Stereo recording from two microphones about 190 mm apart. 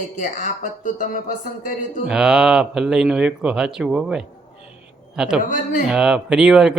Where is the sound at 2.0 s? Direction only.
5° right (ahead or behind).